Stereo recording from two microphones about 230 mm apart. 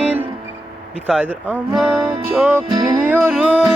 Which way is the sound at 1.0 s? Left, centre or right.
Centre.